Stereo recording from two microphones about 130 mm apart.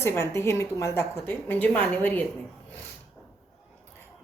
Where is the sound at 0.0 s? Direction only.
20° left (ahead or behind).